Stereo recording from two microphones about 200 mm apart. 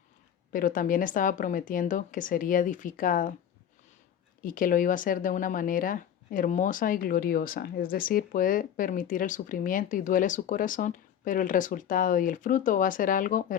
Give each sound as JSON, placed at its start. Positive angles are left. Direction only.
{"t": 0.5, "sound": "a woman's voice", "side_deg": 45}
{"t": 4.4, "sound": "speech", "side_deg": 40}